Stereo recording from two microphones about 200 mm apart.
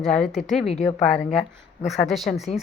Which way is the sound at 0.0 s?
Centre (ahead or behind).